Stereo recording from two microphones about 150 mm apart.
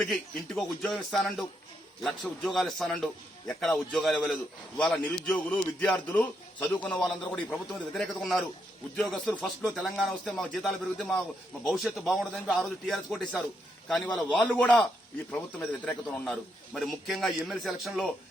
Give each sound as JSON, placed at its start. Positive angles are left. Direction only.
{"t": 0.0, "sound": "a man's voice", "side_deg": 0}